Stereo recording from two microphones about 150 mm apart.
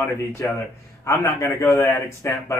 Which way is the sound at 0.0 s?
20° left (ahead or behind).